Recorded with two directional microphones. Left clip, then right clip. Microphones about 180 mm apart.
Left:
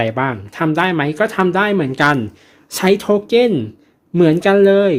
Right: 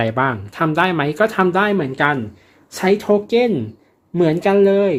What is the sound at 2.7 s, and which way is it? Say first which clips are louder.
Speech: left 1 dB; 40° left (ahead or behind).